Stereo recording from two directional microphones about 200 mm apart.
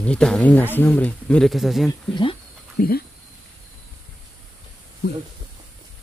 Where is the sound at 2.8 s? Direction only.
45° left (ahead or behind).